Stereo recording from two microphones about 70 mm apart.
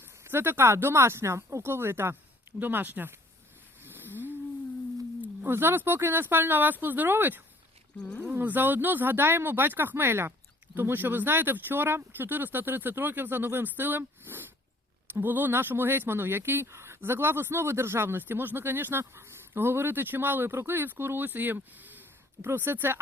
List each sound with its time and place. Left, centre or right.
0.0 s speech: right
3.8 s a sound: right
5.2 s speech: right
7.9 s speech: centre
8.2 s speech: right